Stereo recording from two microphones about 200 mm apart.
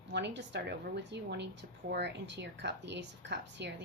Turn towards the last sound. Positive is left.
turn(degrees=-60)  # may be behind; listen again after turning